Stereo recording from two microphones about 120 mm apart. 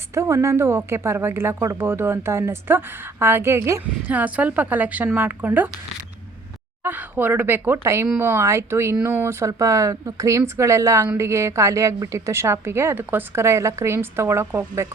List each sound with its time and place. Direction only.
0.1 s a woman's voice: 25° right (ahead or behind)
6.8 s a woman's voice: 15° right (ahead or behind)